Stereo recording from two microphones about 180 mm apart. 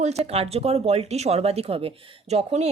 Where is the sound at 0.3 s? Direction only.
35° right (ahead or behind).